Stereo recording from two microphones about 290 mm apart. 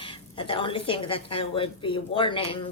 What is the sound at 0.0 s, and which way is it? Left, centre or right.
A woman's voice, centre.